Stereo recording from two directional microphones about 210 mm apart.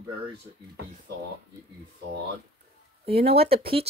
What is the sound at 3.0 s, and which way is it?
Speech, 25° right (ahead or behind).